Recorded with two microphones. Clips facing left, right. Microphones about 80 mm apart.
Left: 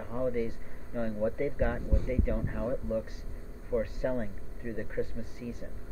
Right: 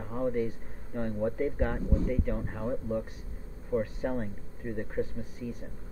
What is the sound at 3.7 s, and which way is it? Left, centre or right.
Speech, right.